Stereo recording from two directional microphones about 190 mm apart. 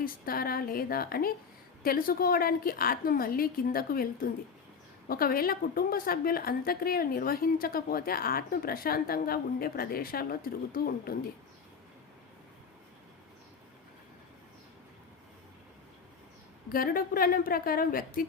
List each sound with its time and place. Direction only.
0.0 s a woman's voice: 50° left (ahead or behind)
16.6 s a woman's voice: 50° left (ahead or behind)